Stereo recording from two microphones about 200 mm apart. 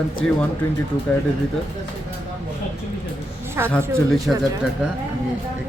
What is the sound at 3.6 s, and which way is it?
Speech, 10° right (ahead or behind).